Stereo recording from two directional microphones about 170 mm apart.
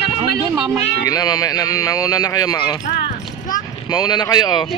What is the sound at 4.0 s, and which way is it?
Speech, 25° left (ahead or behind).